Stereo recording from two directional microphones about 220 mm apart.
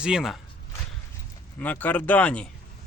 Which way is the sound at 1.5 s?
5° left (ahead or behind).